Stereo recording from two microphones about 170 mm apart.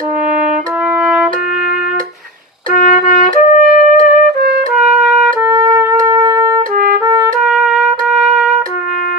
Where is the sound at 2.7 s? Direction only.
55° left (ahead or behind).